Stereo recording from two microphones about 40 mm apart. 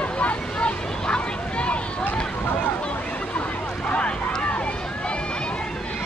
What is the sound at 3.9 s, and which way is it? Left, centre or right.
Boat, left.